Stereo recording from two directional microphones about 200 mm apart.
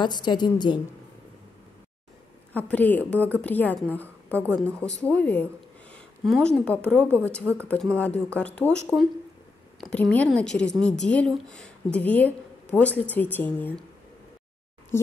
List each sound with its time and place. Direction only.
0.0 s a woman's voice: 20° left (ahead or behind)
2.5 s a woman's voice: 10° left (ahead or behind)
7.0 s a woman's voice: 10° right (ahead or behind)
7.6 s a woman's voice: 5° left (ahead or behind)